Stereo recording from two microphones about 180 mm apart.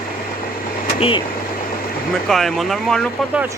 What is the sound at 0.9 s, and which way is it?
Speech, 30° left (ahead or behind).